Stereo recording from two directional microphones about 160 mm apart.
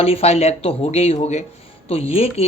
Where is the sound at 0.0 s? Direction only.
40° left (ahead or behind).